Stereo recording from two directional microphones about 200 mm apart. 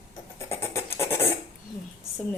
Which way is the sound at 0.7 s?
10° left (ahead or behind).